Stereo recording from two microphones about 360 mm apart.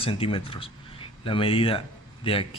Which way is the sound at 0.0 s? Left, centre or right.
Centre.